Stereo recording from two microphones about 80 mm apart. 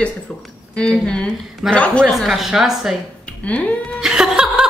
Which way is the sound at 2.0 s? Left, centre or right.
Centre.